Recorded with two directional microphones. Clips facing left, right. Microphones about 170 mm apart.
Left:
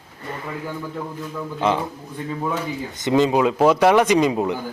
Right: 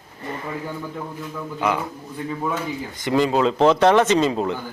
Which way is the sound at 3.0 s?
20° left (ahead or behind).